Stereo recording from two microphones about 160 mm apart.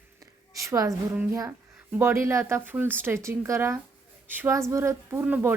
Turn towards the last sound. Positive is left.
turn(degrees=-10)  # may be behind; listen again after turning